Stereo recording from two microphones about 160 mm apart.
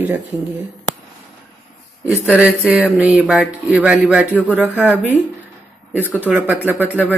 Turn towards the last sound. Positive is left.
turn(degrees=-10)  # may be behind; listen again after turning